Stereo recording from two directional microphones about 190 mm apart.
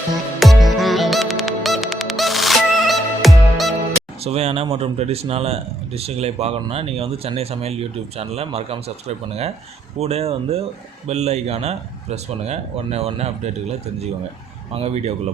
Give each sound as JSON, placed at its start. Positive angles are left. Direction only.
{"t": 0.3, "sound": "music", "side_deg": 0}
{"t": 4.2, "sound": "speech", "side_deg": -35}